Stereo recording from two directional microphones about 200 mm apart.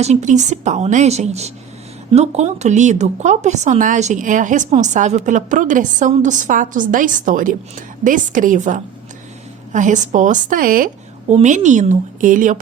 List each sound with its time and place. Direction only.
0.0 s speech: 35° right (ahead or behind)